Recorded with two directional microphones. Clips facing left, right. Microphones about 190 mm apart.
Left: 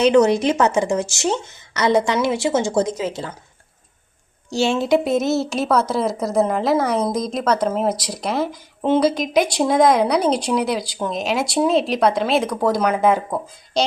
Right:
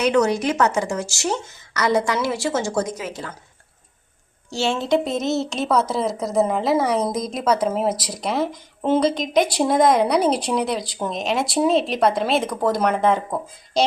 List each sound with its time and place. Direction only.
0.0 s speech: 25° left (ahead or behind)
4.5 s a woman's voice: 15° left (ahead or behind); by 13.9 s centre (ahead or behind)